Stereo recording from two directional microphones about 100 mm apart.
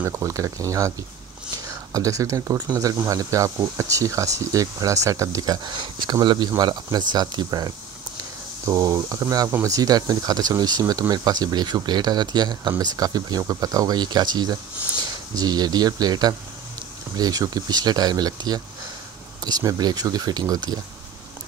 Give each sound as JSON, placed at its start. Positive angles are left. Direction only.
{"t": 0.0, "sound": "speech", "side_deg": -30}